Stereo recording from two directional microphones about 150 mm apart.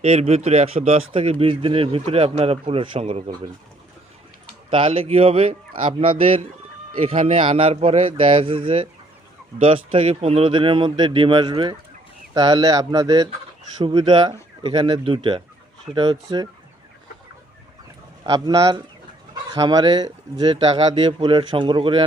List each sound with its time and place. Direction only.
0.0 s speech: 45° right (ahead or behind)
4.7 s speech: 35° right (ahead or behind)
18.2 s a man's voice: 30° right (ahead or behind)